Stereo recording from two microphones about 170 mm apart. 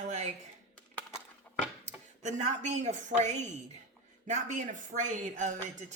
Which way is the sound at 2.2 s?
45° right (ahead or behind).